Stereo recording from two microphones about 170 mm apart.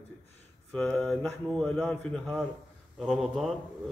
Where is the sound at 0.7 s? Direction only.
5° left (ahead or behind).